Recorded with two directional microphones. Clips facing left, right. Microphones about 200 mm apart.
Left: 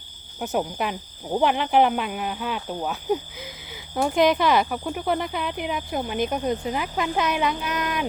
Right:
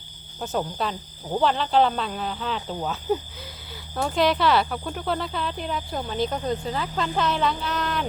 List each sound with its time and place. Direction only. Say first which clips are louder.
0.3 s speech: left 2 dB; 15° left (ahead or behind)